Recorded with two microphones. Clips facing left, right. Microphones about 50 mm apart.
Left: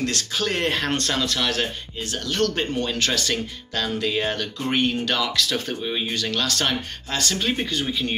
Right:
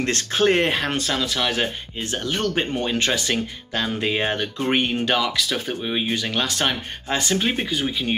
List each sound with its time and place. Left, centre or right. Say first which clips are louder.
0.0 s speech: right 5 dB; right
0.7 s speech: right 1 dB; centre